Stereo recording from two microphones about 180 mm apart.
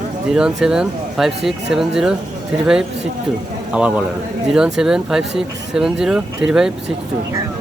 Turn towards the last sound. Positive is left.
turn(degrees=-5)  # may be behind; listen again after turning